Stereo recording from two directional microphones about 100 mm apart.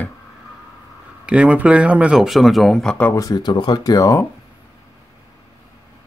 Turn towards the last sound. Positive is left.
turn(degrees=35)  # may be behind; listen again after turning